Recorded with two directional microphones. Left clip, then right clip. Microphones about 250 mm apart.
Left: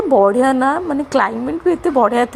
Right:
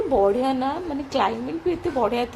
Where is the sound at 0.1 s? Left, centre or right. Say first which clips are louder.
Left 9 dB; left.